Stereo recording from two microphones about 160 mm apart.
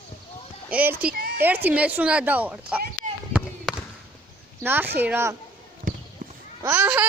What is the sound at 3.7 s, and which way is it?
Basketball bounce, 5° right (ahead or behind).